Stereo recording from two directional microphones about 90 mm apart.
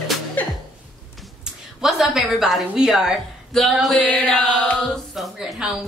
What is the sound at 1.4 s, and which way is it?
A woman's voice, 5° right (ahead or behind).